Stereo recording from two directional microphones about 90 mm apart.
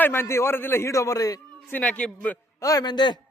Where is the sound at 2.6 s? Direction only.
45° left (ahead or behind).